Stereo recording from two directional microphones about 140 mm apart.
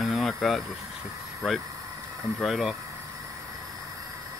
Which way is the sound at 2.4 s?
Centre (ahead or behind).